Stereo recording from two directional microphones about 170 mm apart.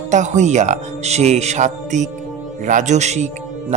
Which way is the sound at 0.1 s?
45° right (ahead or behind).